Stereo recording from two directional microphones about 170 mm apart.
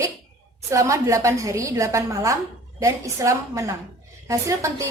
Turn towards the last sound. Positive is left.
turn(degrees=-15)  # may be behind; listen again after turning